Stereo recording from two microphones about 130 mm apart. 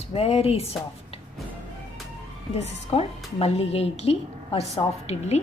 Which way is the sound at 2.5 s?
55° left (ahead or behind).